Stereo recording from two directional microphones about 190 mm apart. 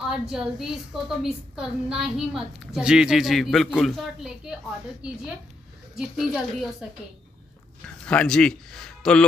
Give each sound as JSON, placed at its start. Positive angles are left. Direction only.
{"t": 0.3, "sound": "a woman's voice", "side_deg": 0}
{"t": 5.9, "sound": "a woman's voice", "side_deg": -5}